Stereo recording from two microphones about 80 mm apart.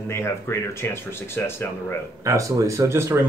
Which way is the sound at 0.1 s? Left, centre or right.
Left.